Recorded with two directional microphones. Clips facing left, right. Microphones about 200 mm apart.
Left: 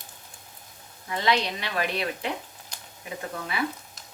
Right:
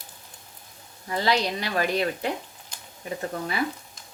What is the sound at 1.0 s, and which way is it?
A woman's voice, 35° right (ahead or behind).